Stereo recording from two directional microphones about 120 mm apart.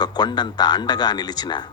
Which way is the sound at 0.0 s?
35° left (ahead or behind).